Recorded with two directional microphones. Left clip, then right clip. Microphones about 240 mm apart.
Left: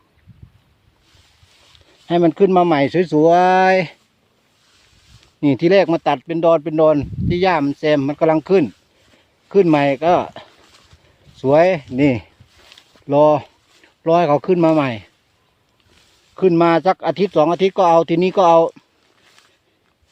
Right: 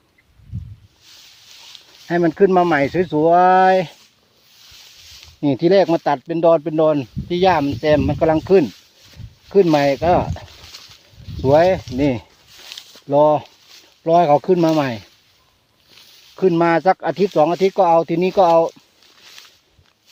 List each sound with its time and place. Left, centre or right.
1.0 s a sound: right
2.0 s speech: left
5.4 s speech: centre
10.6 s pig: right
11.4 s speech: centre
11.9 s speech: left
12.5 s a sound: right
14.0 s speech: centre
16.3 s speech: centre
19.2 s a sound: right